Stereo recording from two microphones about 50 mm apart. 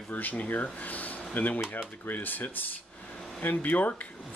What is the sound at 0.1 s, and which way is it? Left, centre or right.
Speech, left.